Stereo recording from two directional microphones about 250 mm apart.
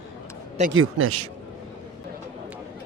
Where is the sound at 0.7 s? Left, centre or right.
Right.